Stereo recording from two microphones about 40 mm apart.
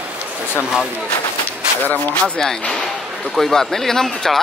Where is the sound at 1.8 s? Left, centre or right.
Left.